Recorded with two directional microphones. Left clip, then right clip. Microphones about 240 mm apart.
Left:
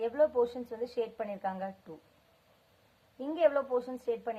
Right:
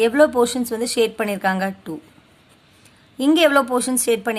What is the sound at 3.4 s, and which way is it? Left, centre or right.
Speech, right.